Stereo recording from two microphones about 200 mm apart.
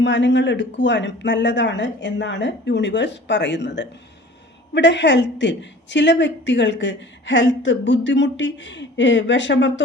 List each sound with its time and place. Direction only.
0.0 s a woman's voice: 65° left (ahead or behind)